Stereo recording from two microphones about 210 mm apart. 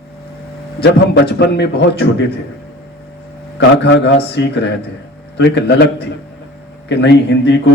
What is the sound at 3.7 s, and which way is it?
A man's voice, 55° left (ahead or behind).